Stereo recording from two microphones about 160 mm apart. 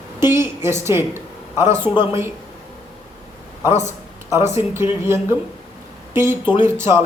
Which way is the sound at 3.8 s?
15° right (ahead or behind).